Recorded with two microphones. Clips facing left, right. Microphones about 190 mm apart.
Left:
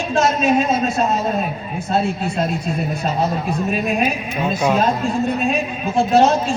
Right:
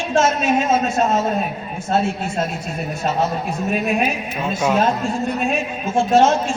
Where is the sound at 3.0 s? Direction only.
35° left (ahead or behind).